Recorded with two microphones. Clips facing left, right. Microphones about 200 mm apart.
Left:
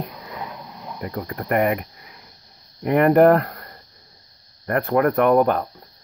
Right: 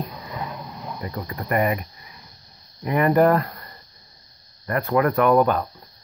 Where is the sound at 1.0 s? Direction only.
55° left (ahead or behind).